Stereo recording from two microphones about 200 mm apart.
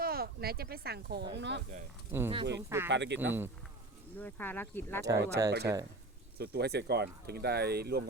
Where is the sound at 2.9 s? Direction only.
60° right (ahead or behind).